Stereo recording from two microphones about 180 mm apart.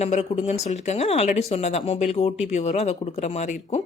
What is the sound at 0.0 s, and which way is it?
Speech, 35° left (ahead or behind).